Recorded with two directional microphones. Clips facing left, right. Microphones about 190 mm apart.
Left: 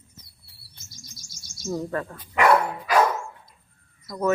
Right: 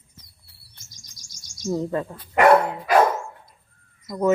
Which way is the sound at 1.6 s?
20° right (ahead or behind).